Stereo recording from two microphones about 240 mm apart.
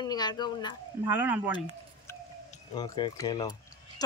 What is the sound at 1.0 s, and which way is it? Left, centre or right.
Speech, centre.